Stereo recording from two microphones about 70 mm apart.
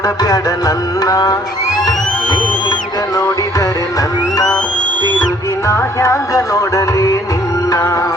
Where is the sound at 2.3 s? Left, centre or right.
Left.